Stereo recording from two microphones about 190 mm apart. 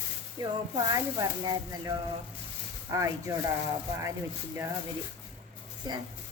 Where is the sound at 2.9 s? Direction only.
15° right (ahead or behind).